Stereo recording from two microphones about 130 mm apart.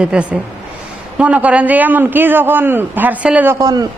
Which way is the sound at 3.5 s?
30° right (ahead or behind).